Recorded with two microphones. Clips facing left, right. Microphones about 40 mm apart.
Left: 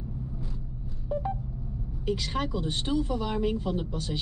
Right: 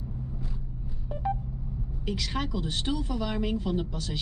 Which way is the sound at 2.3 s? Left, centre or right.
Centre.